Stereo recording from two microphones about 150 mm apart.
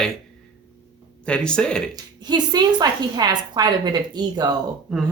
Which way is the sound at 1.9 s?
30° right (ahead or behind).